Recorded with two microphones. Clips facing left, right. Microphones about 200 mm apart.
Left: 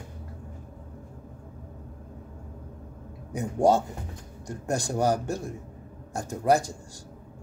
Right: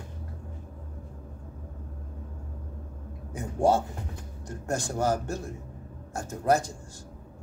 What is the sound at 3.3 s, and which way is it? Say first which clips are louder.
Speech: left 2 dB; 15° left (ahead or behind).